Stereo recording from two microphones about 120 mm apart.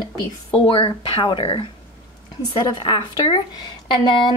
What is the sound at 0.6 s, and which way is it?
A woman's voice, 45° left (ahead or behind).